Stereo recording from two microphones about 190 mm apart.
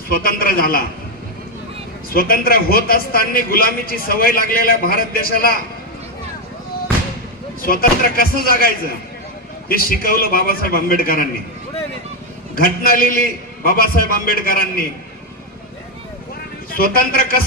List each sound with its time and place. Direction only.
0.1 s a man's voice: 50° left (ahead or behind)
2.1 s a man's voice: 50° left (ahead or behind)
7.6 s a man's voice: 50° left (ahead or behind)
12.5 s a man's voice: 50° left (ahead or behind)
16.7 s a man's voice: 50° left (ahead or behind)